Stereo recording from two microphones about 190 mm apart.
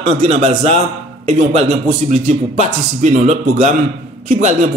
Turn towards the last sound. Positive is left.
turn(degrees=-40)  # may be behind; listen again after turning